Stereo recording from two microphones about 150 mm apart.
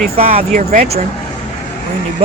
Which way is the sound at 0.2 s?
45° right (ahead or behind).